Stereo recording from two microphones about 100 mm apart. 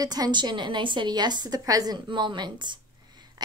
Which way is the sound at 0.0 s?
40° right (ahead or behind).